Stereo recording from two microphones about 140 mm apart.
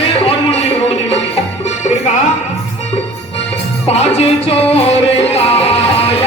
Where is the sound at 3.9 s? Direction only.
45° left (ahead or behind).